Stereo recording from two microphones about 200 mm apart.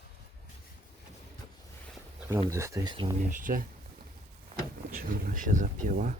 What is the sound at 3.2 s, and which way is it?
Speech, 40° right (ahead or behind).